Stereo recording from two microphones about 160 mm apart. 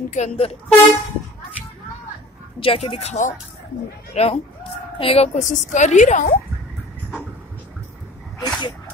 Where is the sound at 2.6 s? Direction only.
35° left (ahead or behind); by 6.3 s 55° left (ahead or behind).